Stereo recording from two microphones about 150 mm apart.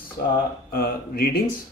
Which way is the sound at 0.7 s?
80° left.